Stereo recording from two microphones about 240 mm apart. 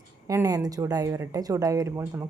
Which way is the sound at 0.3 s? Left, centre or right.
Centre.